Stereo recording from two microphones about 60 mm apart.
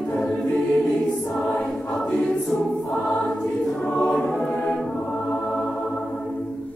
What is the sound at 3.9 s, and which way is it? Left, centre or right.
Choir, centre.